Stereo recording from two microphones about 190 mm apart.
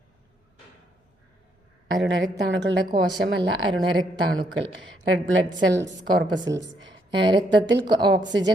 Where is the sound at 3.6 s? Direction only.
25° right (ahead or behind).